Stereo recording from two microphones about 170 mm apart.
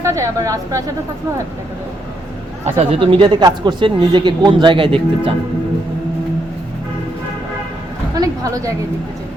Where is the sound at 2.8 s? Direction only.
30° right (ahead or behind).